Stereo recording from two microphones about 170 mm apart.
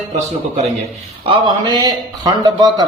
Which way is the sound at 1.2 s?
25° right (ahead or behind).